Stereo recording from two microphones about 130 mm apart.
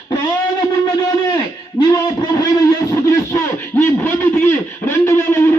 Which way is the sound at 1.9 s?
25° left (ahead or behind).